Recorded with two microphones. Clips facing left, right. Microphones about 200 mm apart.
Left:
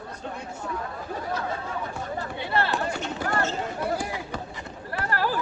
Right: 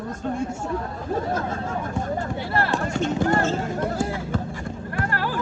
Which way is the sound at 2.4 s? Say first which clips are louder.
Left 2 dB; 25° left (ahead or behind).